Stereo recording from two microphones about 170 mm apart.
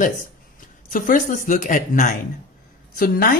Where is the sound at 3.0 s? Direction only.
60° left (ahead or behind).